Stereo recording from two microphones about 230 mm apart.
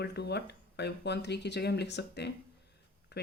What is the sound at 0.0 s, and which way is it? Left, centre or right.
Speech, left.